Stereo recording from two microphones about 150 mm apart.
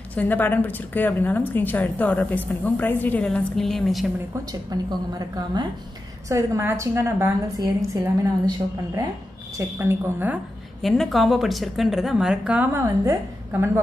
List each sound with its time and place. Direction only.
0.1 s a woman's voice: 10° left (ahead or behind)
4.7 s a woman's voice: 25° right (ahead or behind)
10.8 s a woman's voice: centre (ahead or behind); by 13.7 s 15° right (ahead or behind)